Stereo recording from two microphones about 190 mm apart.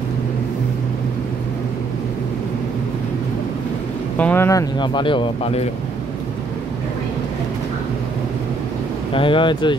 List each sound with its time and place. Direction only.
4.2 s speech: 10° left (ahead or behind); by 5.7 s 30° left (ahead or behind)
9.1 s speech: 25° left (ahead or behind)